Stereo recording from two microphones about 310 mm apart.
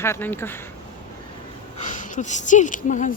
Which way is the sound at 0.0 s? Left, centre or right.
Centre.